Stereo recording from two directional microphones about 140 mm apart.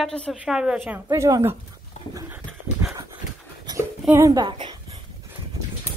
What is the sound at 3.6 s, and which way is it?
Dog, 25° right (ahead or behind).